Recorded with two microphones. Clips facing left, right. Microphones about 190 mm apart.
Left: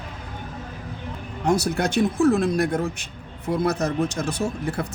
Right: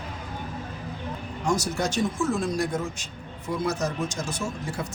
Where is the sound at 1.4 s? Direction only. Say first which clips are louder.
Left 4 dB; 60° left (ahead or behind).